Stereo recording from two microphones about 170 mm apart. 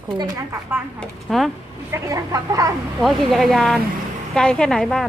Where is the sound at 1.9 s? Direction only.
20° right (ahead or behind).